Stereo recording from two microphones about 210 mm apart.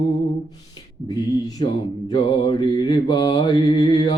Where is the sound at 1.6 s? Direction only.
25° left (ahead or behind).